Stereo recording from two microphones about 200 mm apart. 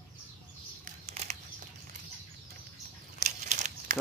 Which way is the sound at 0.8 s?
35° right (ahead or behind).